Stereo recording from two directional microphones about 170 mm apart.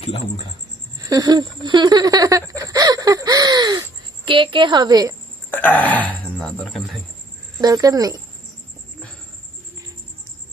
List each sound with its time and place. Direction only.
0.9 s a woman's voice: 20° right (ahead or behind)
5.5 s speech: 10° left (ahead or behind)
7.6 s a woman's voice: 20° right (ahead or behind)